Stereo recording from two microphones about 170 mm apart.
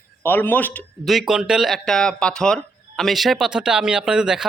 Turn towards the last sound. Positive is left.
turn(degrees=-5)  # may be behind; listen again after turning